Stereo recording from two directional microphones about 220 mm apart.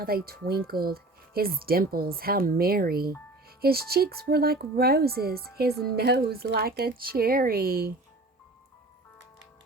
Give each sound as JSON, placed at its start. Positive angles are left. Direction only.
{"t": 0.0, "sound": "speech", "side_deg": -45}